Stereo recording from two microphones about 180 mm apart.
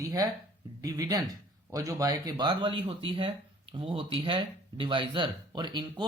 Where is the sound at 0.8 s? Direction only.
20° right (ahead or behind).